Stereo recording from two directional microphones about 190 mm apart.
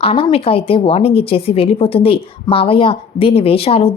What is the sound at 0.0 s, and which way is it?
Speech, 30° left (ahead or behind).